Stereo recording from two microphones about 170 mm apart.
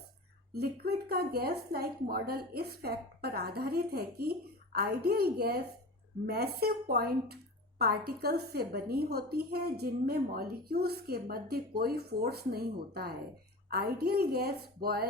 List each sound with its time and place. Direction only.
0.5 s a woman's voice: 70° right (ahead or behind)